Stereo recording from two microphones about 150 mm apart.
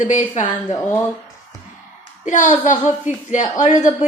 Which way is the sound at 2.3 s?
55° left (ahead or behind).